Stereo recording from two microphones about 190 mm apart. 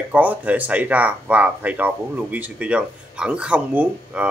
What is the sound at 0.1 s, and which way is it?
Speech, 10° right (ahead or behind).